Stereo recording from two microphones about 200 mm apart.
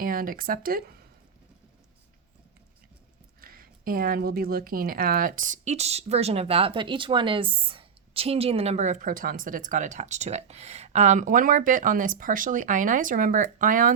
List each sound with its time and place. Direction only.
0.0 s speech: 45° right (ahead or behind)
3.4 s speech: 45° right (ahead or behind)